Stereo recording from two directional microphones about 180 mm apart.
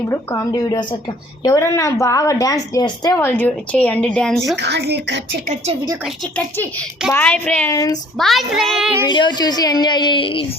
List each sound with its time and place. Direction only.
0.1 s a woman's voice: 20° left (ahead or behind)
4.5 s speech: 70° right (ahead or behind)
7.1 s a woman's voice: 10° left (ahead or behind)
7.7 s a woman's voice: 20° left (ahead or behind)
8.2 s speech: centre (ahead or behind)
9.0 s a woman's voice: 25° left (ahead or behind)